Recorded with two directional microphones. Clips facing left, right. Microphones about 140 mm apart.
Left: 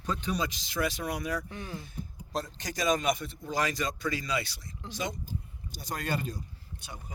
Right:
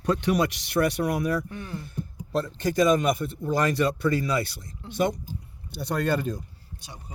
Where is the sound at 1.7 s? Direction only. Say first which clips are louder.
Right 6 dB; 60° right (ahead or behind).